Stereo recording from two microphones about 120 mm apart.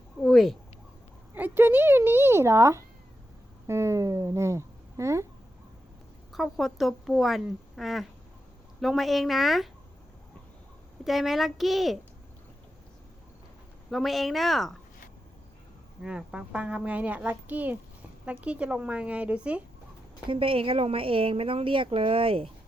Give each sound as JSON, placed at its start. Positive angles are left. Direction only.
{"t": 0.2, "sound": "a sound", "side_deg": 0}
{"t": 1.3, "sound": "speech", "side_deg": -15}
{"t": 6.3, "sound": "speech", "side_deg": 0}
{"t": 11.0, "sound": "speech", "side_deg": 0}
{"t": 13.9, "sound": "speech", "side_deg": 0}
{"t": 16.0, "sound": "speech", "side_deg": -5}
{"t": 20.3, "sound": "a woman's voice", "side_deg": -50}